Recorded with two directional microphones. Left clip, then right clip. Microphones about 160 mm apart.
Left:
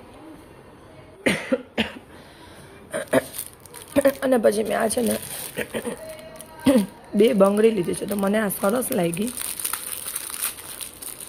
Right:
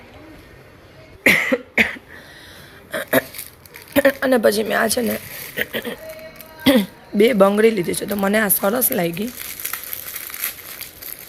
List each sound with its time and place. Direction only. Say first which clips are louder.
1.2 s cough: right 8 dB; 15° right (ahead or behind)
2.9 s a sound: right 3 dB; centre (ahead or behind)
3.9 s a woman's voice: right 3 dB; 5° right (ahead or behind)
5.0 s speech: right 1 dB; 5° left (ahead or behind)